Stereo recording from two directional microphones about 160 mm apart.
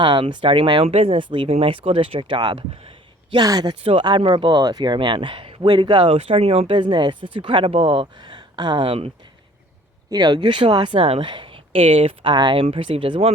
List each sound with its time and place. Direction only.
0.0 s speech: 30° right (ahead or behind)
10.1 s speech: 25° right (ahead or behind)